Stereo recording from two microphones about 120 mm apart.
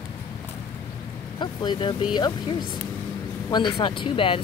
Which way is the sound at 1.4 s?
40° left (ahead or behind).